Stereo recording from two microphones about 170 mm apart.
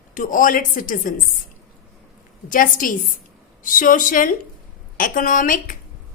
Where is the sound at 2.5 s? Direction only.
50° left (ahead or behind).